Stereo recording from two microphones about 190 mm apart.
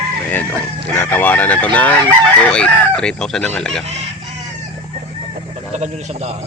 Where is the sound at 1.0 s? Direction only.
10° left (ahead or behind).